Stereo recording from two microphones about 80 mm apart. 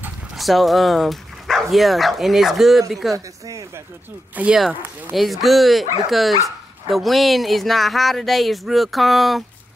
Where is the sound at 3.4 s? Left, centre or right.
Right.